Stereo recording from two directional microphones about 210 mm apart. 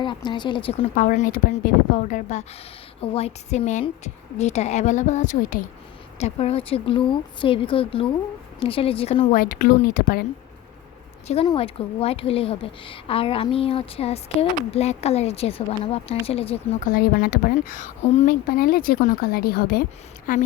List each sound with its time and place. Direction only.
0.0 s a woman's voice: 20° left (ahead or behind)
9.3 s speech: 40° left (ahead or behind)
11.4 s a woman's voice: 25° left (ahead or behind)
16.9 s a woman's voice: 45° left (ahead or behind)